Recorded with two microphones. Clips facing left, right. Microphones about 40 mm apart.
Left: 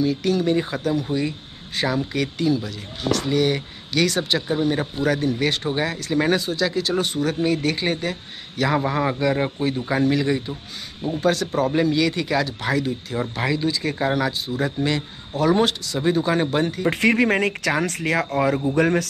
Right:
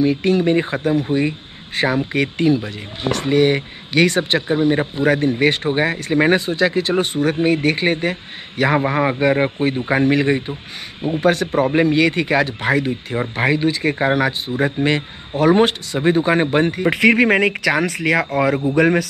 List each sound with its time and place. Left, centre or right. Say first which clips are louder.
0.0 s speech: right 5 dB; right
17.6 s speech: right 5 dB; right
18.5 s speech: right 3 dB; centre